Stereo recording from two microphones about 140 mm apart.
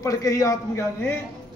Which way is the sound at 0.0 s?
25° left (ahead or behind).